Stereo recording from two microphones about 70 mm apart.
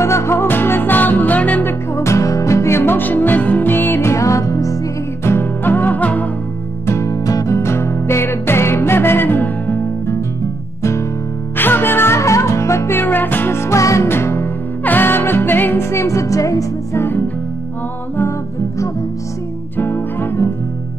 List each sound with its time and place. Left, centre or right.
0.0 s music: left
5.2 s music: left
6.9 s music: left
10.8 s music: left
11.5 s music: left
14.0 s music: left
19.8 s music: left